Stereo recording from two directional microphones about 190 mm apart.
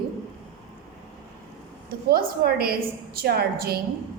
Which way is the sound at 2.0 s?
55° right (ahead or behind).